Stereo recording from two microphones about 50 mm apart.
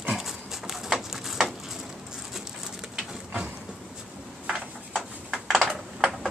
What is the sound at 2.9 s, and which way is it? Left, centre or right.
Bird, centre.